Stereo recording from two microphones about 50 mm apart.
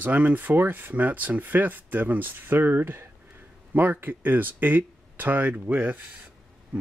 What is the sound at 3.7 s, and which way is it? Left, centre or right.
Speech, right.